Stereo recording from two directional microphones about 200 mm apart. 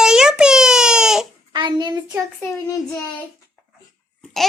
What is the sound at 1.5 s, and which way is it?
Child singing, 20° right (ahead or behind).